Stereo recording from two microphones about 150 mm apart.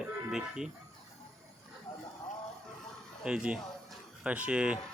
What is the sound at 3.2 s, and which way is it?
Speech, 5° right (ahead or behind).